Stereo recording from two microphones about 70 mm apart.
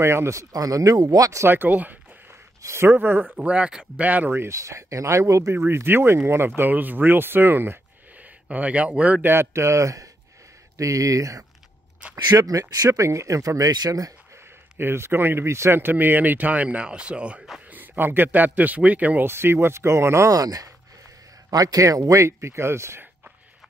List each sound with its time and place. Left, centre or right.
0.0 s speech: right
0.5 s speech: right
0.9 s speech: right
1.4 s a man's voice: right
2.6 s a man's voice: right
4.5 s a man's voice: right
8.5 s a man's voice: centre
9.3 s a man's voice: right
14.3 s a man's voice: right; by 17.4 s centre
17.6 s speech: right
19.2 s speech: right
20.2 s a man's voice: right